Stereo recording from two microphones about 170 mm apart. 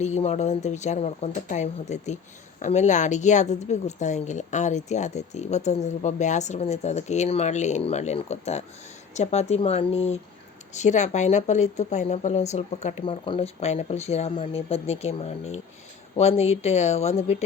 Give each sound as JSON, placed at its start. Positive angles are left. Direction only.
{"t": 0.0, "sound": "speech", "side_deg": 40}